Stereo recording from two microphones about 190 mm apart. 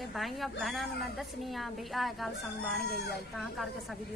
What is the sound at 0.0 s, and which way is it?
A woman's voice, centre (ahead or behind).